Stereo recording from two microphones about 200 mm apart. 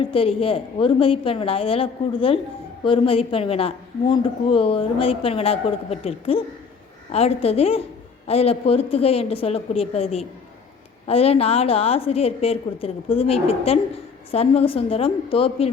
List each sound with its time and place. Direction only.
0.0 s speech: 25° left (ahead or behind)